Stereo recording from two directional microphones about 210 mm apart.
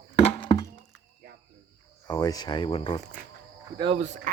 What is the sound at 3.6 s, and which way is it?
Speech, 20° right (ahead or behind).